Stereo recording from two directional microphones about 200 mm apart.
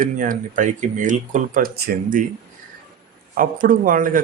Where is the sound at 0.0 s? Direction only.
40° right (ahead or behind).